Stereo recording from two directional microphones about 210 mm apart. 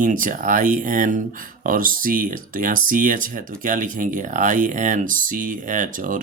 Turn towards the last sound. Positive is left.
turn(degrees=-40)  # may be behind; listen again after turning